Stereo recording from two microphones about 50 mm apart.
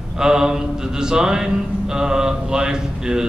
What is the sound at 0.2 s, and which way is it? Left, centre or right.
Music, centre.